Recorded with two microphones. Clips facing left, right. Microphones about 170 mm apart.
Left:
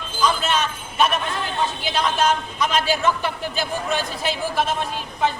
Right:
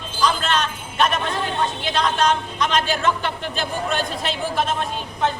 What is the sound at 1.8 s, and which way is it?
A man's voice, 5° left (ahead or behind).